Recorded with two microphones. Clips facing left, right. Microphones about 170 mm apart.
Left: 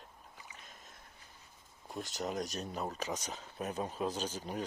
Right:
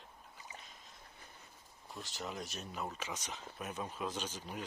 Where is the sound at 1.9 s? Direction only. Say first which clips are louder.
Left 6 dB; 45° left (ahead or behind).